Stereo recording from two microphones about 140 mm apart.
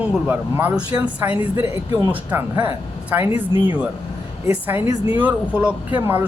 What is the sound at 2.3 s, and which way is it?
Speech, 15° right (ahead or behind).